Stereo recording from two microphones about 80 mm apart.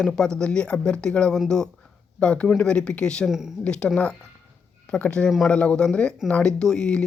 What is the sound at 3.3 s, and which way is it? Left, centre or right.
Speech, centre.